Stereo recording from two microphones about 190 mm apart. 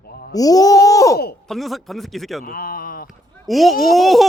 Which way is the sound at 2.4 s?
50° left (ahead or behind).